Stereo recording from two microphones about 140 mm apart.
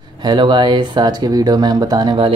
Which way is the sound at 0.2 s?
30° right (ahead or behind).